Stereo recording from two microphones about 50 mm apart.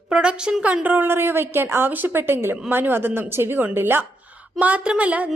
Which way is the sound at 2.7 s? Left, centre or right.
Right.